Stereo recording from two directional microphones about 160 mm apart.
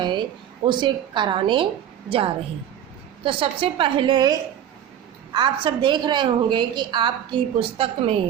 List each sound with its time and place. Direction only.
0.0 s a woman's voice: 30° right (ahead or behind)